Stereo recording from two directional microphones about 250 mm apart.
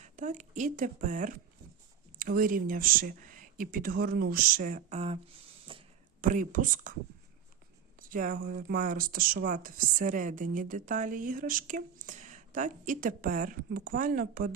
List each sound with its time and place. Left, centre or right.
0.0 s speech: right
5.7 s a sound: right
6.2 s speech: right
7.9 s speech: right